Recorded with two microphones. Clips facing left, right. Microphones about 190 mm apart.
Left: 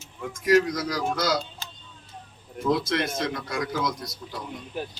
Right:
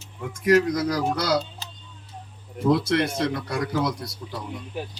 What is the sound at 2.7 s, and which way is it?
Speech, 65° right (ahead or behind).